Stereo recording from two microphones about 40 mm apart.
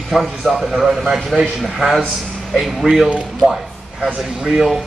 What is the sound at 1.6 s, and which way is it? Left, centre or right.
A man's voice, centre.